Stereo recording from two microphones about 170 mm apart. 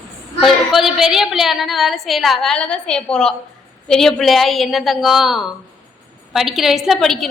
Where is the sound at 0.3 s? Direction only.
Centre (ahead or behind).